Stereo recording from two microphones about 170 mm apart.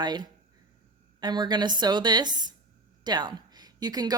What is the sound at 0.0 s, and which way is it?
A woman's voice, 25° right (ahead or behind).